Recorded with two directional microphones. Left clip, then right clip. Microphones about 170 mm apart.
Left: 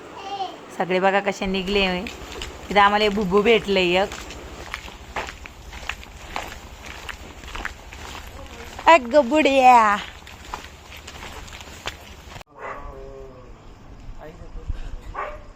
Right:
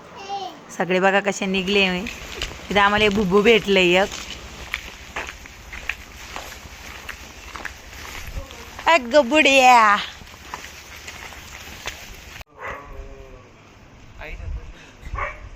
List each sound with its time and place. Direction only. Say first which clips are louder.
0.8 s speech: right 1 dB; 15° right (ahead or behind)
4.7 s walk: right 2 dB; 5° left (ahead or behind)
8.8 s speech: left 1 dB; centre (ahead or behind)